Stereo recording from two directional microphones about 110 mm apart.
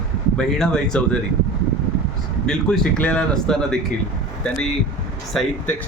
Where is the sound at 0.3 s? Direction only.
5° left (ahead or behind).